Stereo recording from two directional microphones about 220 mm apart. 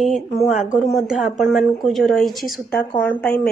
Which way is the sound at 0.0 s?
Centre (ahead or behind).